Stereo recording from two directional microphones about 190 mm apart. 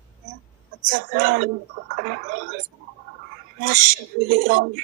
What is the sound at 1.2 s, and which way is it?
Speech, 45° right (ahead or behind).